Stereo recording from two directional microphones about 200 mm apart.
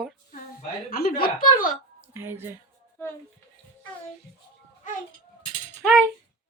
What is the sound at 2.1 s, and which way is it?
Speech, 10° right (ahead or behind).